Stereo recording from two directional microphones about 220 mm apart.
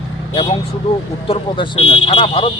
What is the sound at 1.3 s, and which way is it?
Speech, 20° left (ahead or behind).